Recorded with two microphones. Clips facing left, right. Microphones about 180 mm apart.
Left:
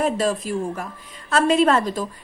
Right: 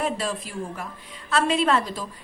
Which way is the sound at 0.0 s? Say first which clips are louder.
Left 6 dB; 45° left (ahead or behind).